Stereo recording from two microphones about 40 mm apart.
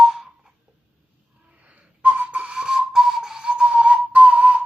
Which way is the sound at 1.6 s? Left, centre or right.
Right.